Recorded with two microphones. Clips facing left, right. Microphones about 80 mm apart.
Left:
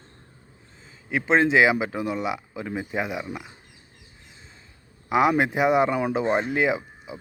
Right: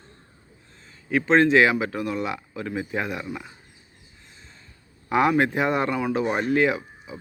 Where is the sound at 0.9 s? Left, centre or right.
Centre.